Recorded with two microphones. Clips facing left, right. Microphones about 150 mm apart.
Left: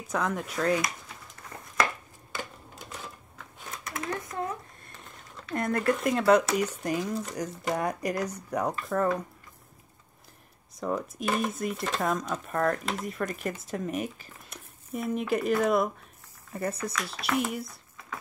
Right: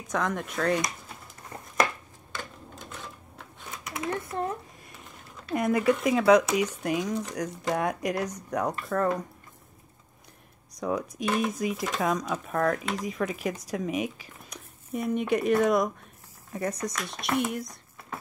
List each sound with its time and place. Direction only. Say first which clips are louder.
0.1 s speech: right 1 dB; 5° left (ahead or behind)
1.5 s a sound: right 3 dB; 25° right (ahead or behind)
3.8 s a sound: right 3 dB; 20° right (ahead or behind)
4.3 s speech: right 3 dB; 30° right (ahead or behind)
4.8 s a sound: right 1 dB; 5° right (ahead or behind)
6.8 s speech: right 2 dB; centre (ahead or behind)
7.8 s speech: right 1 dB; 5° right (ahead or behind)
8.4 s speech: even; 10° left (ahead or behind)
10.8 s speech: right 1 dB; centre (ahead or behind)